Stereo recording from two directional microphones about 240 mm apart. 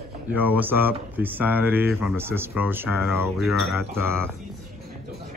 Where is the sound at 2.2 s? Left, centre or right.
Centre.